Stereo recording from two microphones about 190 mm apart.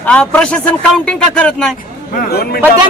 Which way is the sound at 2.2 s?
55° left (ahead or behind).